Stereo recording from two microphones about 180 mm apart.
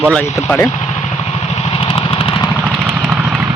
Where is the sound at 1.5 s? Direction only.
35° left (ahead or behind).